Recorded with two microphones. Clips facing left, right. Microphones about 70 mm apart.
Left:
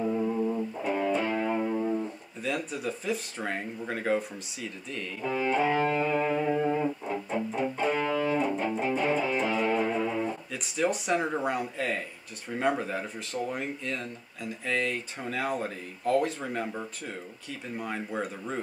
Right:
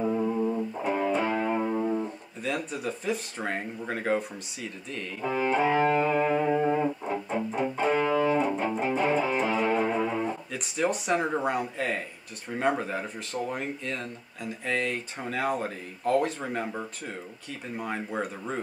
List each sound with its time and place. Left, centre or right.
0.0 s music: centre
2.4 s speech: centre
5.2 s speech: centre
5.9 s music: centre
10.5 s speech: centre